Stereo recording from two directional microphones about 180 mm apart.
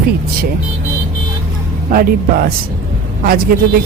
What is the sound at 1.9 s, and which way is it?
Speech, 55° right (ahead or behind).